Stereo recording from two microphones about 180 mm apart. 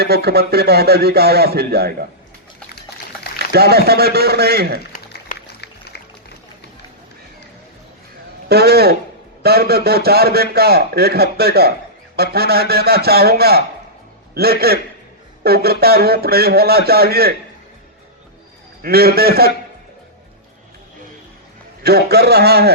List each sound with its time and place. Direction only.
0.0 s a man's voice: 65° right (ahead or behind)
3.3 s a man's voice: 60° right (ahead or behind)
5.3 s music: 50° left (ahead or behind)
8.4 s a man's voice: 60° right (ahead or behind)
18.8 s a man's voice: 60° right (ahead or behind)
21.8 s a man's voice: 60° right (ahead or behind)